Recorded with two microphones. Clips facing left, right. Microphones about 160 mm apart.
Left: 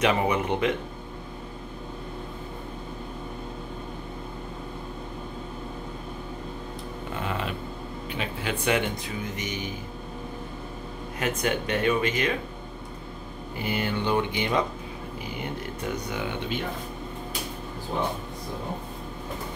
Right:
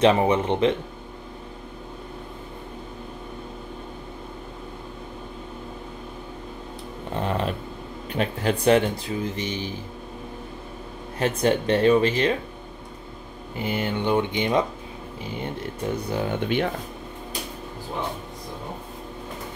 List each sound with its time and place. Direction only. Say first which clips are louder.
0.0 s speech: right 5 dB; 30° right (ahead or behind)
7.2 s music: right 6 dB; 35° right (ahead or behind)
8.1 s speech: right 7 dB; 45° right (ahead or behind)
11.1 s speech: right 5 dB; 30° right (ahead or behind)
13.6 s speech: right 2 dB; 20° right (ahead or behind)